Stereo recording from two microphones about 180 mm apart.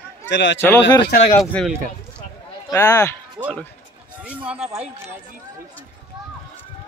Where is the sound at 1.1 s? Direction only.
45° left (ahead or behind).